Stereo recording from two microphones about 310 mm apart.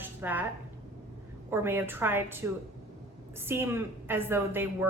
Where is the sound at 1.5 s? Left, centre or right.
Centre.